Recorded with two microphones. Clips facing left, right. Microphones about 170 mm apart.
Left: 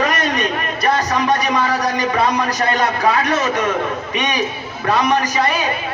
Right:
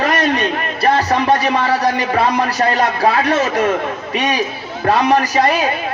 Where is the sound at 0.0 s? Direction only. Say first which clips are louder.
Right 2 dB; 35° right (ahead or behind).